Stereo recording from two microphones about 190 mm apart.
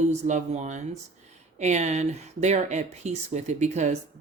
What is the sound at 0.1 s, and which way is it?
Speech, 40° right (ahead or behind).